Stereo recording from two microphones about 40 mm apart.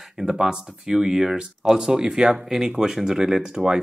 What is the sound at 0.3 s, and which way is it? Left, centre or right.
Speech, centre.